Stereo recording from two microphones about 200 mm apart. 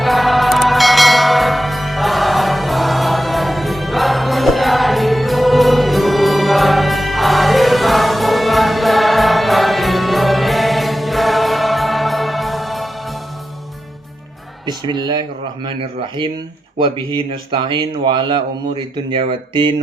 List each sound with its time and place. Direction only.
0.0 s music: centre (ahead or behind)
14.7 s speech: 20° right (ahead or behind)